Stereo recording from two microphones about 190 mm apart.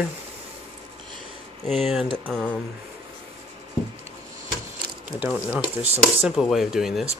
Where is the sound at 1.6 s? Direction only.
Centre (ahead or behind).